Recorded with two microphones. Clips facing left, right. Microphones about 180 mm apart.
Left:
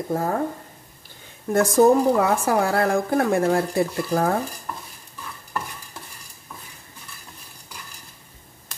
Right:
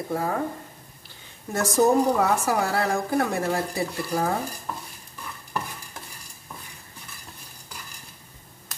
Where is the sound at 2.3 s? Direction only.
55° left (ahead or behind).